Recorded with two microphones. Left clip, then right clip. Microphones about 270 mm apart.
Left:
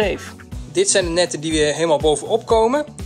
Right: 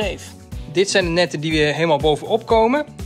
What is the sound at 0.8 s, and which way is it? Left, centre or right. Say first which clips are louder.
Speech: even; centre.